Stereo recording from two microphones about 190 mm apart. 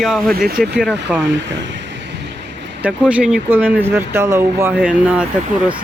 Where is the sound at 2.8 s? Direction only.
5° right (ahead or behind).